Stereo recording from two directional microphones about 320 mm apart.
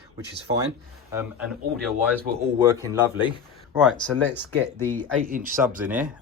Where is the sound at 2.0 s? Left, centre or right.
Centre.